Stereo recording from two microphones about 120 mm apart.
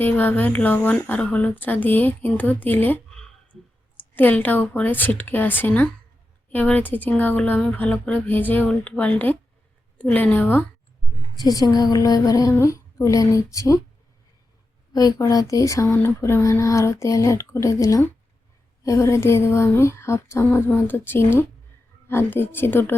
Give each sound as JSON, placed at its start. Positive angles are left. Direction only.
{"t": 0.0, "sound": "a woman's voice", "side_deg": 15}
{"t": 11.3, "sound": "a woman's voice", "side_deg": 35}
{"t": 14.9, "sound": "a woman's voice", "side_deg": 30}